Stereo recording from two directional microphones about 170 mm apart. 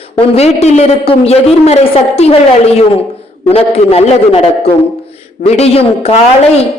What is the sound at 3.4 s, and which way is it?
A man's voice, 35° left (ahead or behind).